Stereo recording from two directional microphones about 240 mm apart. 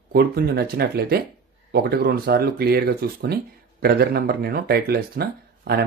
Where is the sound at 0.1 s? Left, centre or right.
Right.